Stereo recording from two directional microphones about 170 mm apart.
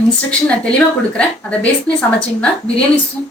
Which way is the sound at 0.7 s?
5° left (ahead or behind).